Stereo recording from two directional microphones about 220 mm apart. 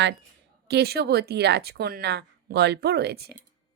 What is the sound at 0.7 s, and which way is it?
Speech, 45° right (ahead or behind).